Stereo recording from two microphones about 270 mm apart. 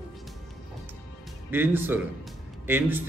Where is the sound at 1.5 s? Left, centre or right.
Centre.